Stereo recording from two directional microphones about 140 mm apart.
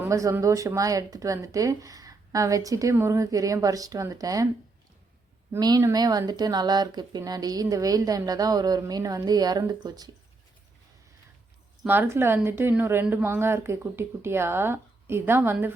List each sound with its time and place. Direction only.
0.0 s a woman's voice: 20° right (ahead or behind)
5.5 s a woman's voice: 30° right (ahead or behind)
11.9 s a woman's voice: 15° right (ahead or behind)